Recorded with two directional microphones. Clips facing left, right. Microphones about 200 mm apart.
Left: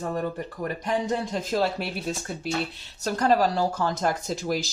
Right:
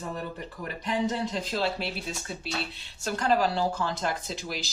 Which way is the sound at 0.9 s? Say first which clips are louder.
Left 1 dB; 45° left (ahead or behind).